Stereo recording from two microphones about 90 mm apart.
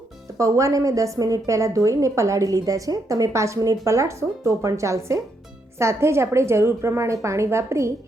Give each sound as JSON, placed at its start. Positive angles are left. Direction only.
{"t": 0.3, "sound": "a woman's voice", "side_deg": -35}